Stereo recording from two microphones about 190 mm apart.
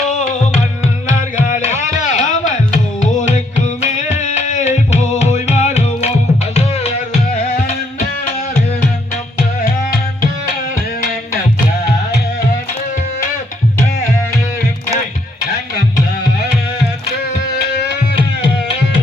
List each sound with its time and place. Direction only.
0.1 s music: 40° left (ahead or behind)